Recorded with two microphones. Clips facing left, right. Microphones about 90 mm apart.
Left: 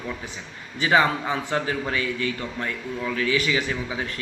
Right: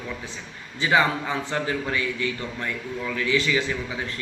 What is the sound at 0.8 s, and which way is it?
Speech, 15° left (ahead or behind).